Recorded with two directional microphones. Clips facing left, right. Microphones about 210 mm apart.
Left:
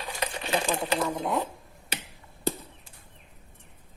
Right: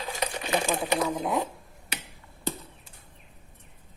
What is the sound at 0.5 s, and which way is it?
Speech, 10° right (ahead or behind).